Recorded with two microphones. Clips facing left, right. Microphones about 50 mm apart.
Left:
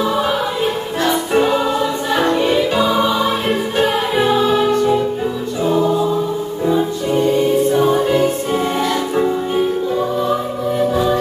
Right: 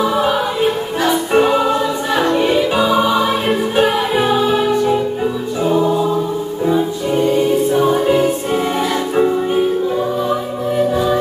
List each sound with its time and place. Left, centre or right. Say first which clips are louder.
1.0 s music: right 2 dB; centre
9.6 s music: right 1 dB; centre